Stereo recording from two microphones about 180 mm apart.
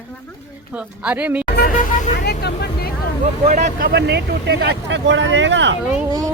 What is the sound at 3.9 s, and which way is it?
Speech, 70° right (ahead or behind).